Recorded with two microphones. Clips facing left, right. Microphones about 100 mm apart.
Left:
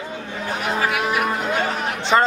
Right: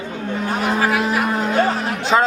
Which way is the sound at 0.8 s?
35° right (ahead or behind).